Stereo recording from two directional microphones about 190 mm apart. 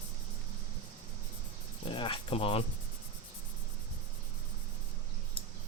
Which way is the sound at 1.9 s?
25° left (ahead or behind).